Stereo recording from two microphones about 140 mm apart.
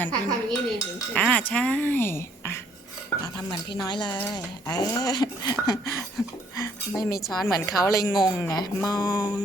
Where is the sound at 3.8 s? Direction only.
30° left (ahead or behind).